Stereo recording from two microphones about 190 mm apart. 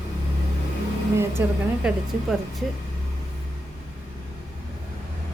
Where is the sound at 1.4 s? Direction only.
Centre (ahead or behind).